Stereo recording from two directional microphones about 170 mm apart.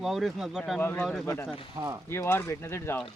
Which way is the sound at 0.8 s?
10° left (ahead or behind).